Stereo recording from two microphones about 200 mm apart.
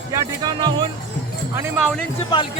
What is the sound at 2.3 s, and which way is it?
Speech, 20° left (ahead or behind).